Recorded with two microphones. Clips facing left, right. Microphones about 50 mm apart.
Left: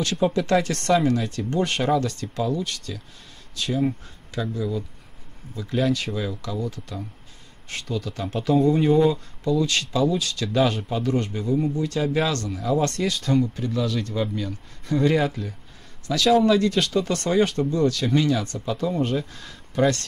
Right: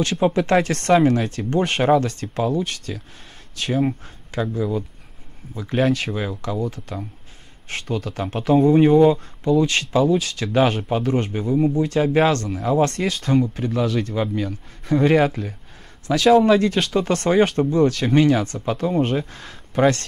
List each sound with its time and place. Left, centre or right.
0.0 s speech: right
3.5 s speech: right
11.5 s speech: right
11.8 s speech: right
15.1 s speech: right
16.1 s speech: right